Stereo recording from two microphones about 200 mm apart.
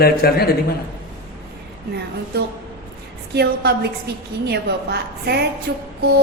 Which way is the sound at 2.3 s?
50° right (ahead or behind).